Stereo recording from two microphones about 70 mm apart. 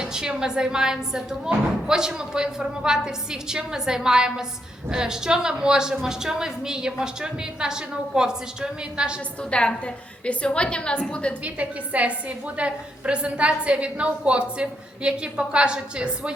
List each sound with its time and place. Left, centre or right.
0.0 s a woman's voice: centre
9.4 s a woman's voice: centre
11.4 s a woman's voice: centre